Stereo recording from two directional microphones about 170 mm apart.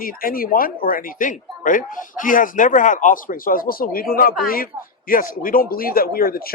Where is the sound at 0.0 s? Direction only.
60° left (ahead or behind).